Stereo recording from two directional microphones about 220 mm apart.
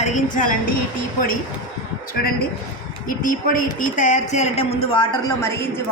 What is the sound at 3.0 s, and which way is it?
A woman's voice, 40° left (ahead or behind).